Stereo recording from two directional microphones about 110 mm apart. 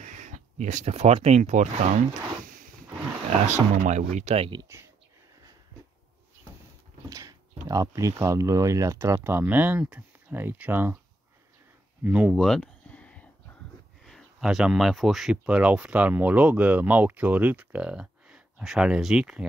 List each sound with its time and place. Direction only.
0.0 s speech: 90° right
3.4 s speech: 90° right
4.7 s speech: 25° right (ahead or behind)
7.1 s speech: 30° right (ahead or behind)
12.0 s speech: 10° right (ahead or behind)
12.4 s a sound: 5° left (ahead or behind)
14.0 s speech: centre (ahead or behind)